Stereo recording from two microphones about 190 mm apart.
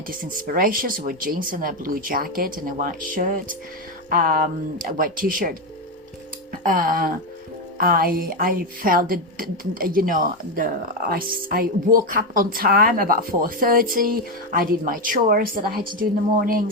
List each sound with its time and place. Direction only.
0.1 s speech: 50° right (ahead or behind)
6.5 s music: 45° right (ahead or behind)
7.8 s speech: 50° right (ahead or behind)